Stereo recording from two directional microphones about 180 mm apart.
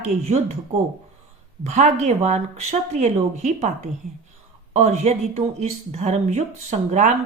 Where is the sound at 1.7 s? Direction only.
40° right (ahead or behind).